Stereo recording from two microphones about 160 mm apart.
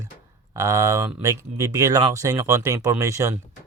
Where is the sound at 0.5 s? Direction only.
20° right (ahead or behind).